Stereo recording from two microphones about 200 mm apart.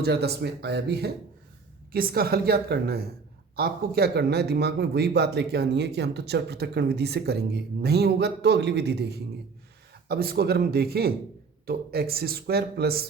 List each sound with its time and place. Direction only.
0.0 s speech: 55° right (ahead or behind)